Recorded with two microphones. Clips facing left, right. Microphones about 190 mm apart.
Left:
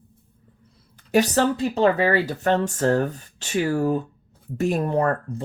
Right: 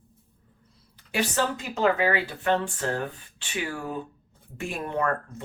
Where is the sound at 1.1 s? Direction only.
40° left (ahead or behind).